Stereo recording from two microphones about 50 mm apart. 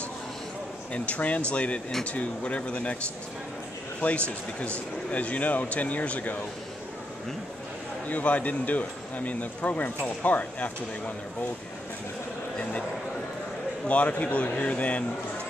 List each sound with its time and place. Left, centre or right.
0.9 s speech: left
4.0 s speech: left
8.1 s speech: left
13.8 s speech: left